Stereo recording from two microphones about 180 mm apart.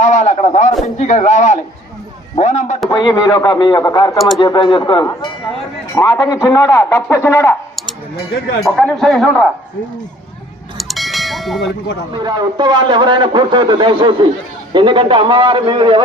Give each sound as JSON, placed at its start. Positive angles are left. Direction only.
{"t": 0.0, "sound": "a man's voice", "side_deg": 40}
{"t": 2.9, "sound": "speech", "side_deg": 20}
{"t": 8.6, "sound": "speech", "side_deg": 0}
{"t": 10.8, "sound": "bell", "side_deg": 0}
{"t": 12.1, "sound": "a man's voice", "side_deg": -25}